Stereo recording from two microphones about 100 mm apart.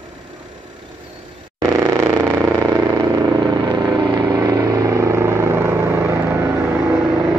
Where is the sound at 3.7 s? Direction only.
40° right (ahead or behind).